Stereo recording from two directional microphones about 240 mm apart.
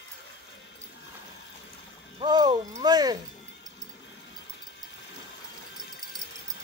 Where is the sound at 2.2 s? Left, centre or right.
Centre.